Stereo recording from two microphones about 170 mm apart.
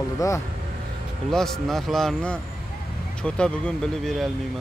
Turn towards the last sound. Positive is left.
turn(degrees=5)  # may be behind; listen again after turning